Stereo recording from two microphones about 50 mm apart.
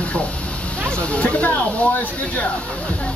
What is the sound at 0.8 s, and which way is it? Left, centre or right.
Speech, left.